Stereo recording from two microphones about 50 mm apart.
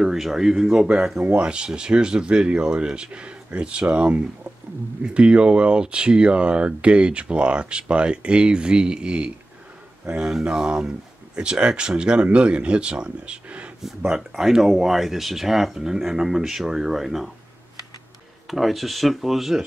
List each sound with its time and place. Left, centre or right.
0.0 s speech: centre
10.4 s speech: centre
14.1 s speech: centre
18.5 s speech: centre